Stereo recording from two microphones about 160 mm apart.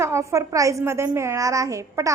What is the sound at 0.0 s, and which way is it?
A woman's voice, 20° right (ahead or behind).